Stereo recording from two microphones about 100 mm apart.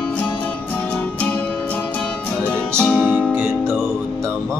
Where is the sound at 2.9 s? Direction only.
10° left (ahead or behind).